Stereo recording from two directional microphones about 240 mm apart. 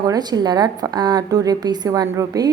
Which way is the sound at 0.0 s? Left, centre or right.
Centre.